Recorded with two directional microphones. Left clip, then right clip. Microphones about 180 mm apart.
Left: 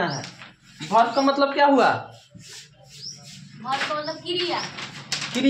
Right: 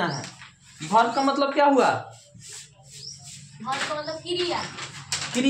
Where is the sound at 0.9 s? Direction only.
30° left (ahead or behind).